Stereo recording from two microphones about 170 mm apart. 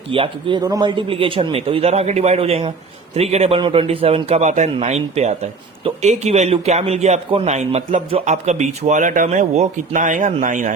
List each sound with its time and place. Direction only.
0.1 s a man's voice: 30° right (ahead or behind); by 10.7 s 50° right (ahead or behind)